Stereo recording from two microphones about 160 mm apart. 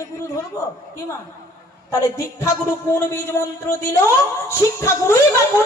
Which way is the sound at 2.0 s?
20° left (ahead or behind).